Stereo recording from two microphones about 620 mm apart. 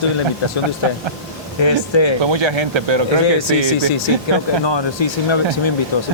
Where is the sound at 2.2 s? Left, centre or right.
Right.